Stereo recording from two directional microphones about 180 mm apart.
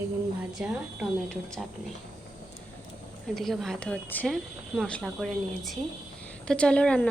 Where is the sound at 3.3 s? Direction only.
Centre (ahead or behind).